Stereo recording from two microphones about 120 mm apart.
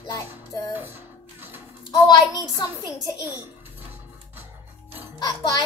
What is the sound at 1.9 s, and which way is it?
Speech, 35° left (ahead or behind).